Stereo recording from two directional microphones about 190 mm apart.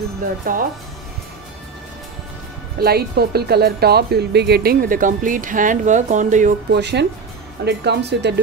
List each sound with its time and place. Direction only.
0.5 s speech: 45° right (ahead or behind)
2.8 s speech: 55° right (ahead or behind)
6.7 s speech: 65° right (ahead or behind)